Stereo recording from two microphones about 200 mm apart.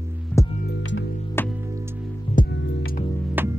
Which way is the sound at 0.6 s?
65° left (ahead or behind).